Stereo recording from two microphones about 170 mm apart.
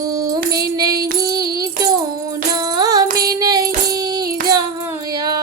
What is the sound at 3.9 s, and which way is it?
Music, 25° right (ahead or behind).